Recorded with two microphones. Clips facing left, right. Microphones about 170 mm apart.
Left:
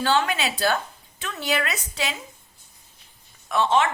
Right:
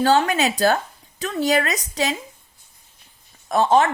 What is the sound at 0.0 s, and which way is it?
A woman's voice, 40° right (ahead or behind).